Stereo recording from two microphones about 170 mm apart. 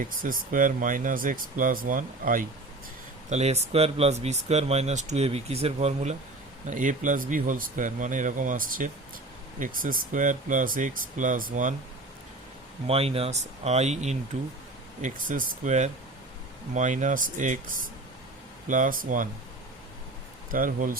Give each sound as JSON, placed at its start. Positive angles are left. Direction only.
{"t": 0.0, "sound": "speech", "side_deg": -55}
{"t": 3.2, "sound": "speech", "side_deg": -40}
{"t": 12.9, "sound": "speech", "side_deg": -35}
{"t": 20.5, "sound": "speech", "side_deg": -55}